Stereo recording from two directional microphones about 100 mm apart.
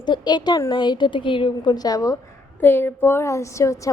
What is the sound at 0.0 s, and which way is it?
A woman's voice, 45° left (ahead or behind).